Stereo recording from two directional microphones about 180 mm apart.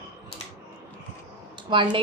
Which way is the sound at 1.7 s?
25° right (ahead or behind).